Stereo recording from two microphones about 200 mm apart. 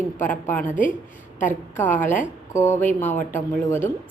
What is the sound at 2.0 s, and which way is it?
Speech, 40° left (ahead or behind).